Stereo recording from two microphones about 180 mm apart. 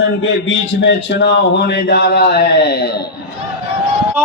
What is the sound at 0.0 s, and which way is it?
A man's voice, 90° left.